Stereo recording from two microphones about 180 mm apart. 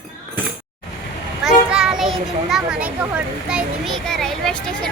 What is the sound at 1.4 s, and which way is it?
Children playing, 5° right (ahead or behind).